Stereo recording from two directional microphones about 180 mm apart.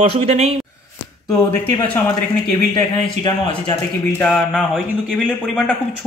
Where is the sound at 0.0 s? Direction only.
35° right (ahead or behind).